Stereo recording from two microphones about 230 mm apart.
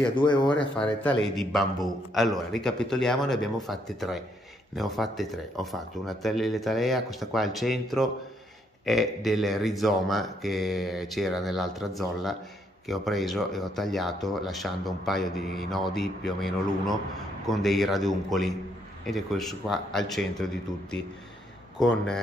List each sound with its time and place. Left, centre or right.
0.1 s speech: centre
1.0 s speech: centre